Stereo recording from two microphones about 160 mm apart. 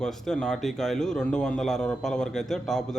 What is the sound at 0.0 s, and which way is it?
Speech, 5° left (ahead or behind).